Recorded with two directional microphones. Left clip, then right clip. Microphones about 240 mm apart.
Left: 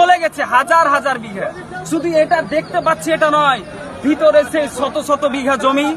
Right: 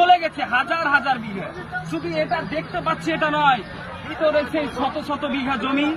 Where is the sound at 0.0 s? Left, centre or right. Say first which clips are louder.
Left 4 dB; centre.